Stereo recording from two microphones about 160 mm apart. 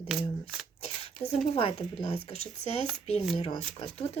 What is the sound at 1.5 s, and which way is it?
Speech, 35° left (ahead or behind).